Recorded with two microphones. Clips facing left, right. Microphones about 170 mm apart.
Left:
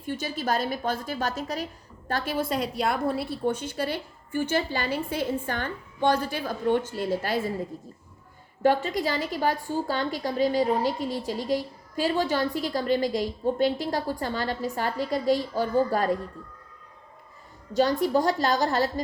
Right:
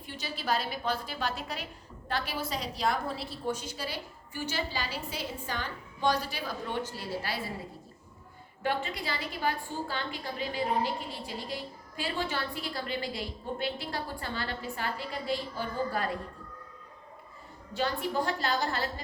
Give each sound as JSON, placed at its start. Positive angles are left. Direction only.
{"t": 0.0, "sound": "a woman's voice", "side_deg": 45}
{"t": 8.6, "sound": "a woman's voice", "side_deg": 40}
{"t": 17.7, "sound": "a woman's voice", "side_deg": 40}